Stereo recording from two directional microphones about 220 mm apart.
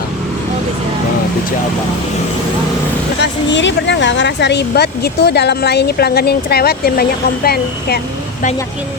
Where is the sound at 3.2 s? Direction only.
55° left (ahead or behind).